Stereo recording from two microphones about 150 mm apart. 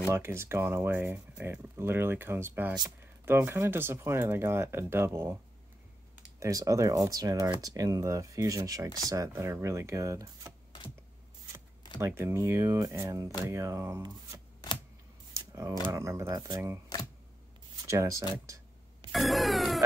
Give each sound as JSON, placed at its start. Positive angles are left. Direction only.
{"t": 0.1, "sound": "speech", "side_deg": -15}
{"t": 6.4, "sound": "speech", "side_deg": -20}
{"t": 12.0, "sound": "speech", "side_deg": -15}
{"t": 15.5, "sound": "speech", "side_deg": -20}
{"t": 17.8, "sound": "a sound", "side_deg": -20}
{"t": 19.1, "sound": "music", "side_deg": 0}